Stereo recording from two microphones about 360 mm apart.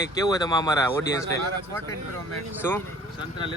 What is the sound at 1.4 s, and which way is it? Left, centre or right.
Speech, right.